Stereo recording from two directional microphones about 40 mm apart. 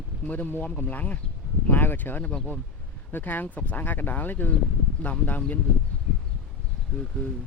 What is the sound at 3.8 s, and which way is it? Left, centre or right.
Speech, left.